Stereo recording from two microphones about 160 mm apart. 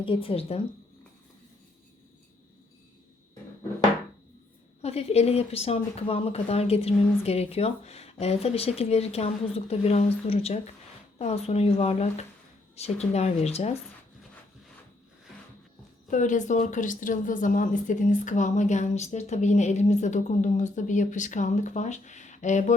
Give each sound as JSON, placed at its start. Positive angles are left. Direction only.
{"t": 0.0, "sound": "speech", "side_deg": 35}
{"t": 4.8, "sound": "speech", "side_deg": 40}
{"t": 16.0, "sound": "speech", "side_deg": 50}